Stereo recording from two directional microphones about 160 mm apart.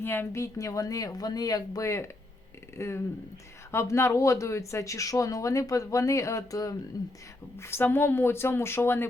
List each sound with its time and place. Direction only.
0.0 s speech: 15° left (ahead or behind)